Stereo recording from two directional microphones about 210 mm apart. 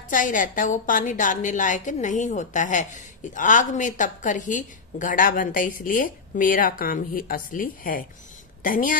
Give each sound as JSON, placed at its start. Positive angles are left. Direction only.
{"t": 0.1, "sound": "a woman's voice", "side_deg": 40}